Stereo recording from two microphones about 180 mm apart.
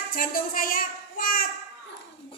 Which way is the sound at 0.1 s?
55° left (ahead or behind).